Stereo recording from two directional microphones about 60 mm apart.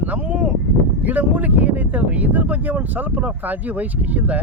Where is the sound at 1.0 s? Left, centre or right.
Right.